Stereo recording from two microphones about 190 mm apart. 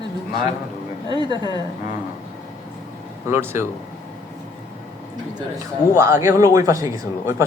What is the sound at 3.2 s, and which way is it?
Speech, 10° right (ahead or behind).